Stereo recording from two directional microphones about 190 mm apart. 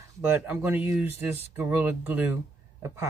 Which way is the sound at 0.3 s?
10° right (ahead or behind).